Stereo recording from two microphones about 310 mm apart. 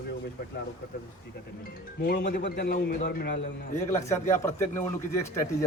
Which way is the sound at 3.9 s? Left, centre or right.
Centre.